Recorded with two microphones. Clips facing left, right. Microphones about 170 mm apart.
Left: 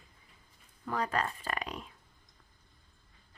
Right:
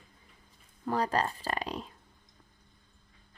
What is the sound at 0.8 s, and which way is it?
Speech, 35° right (ahead or behind).